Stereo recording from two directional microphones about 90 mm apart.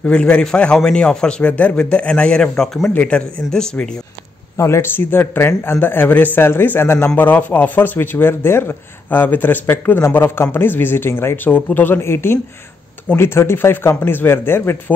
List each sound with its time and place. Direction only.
0.0 s a man's voice: 10° left (ahead or behind)
2.9 s a man's voice: 15° left (ahead or behind)
4.6 s speech: 30° left (ahead or behind)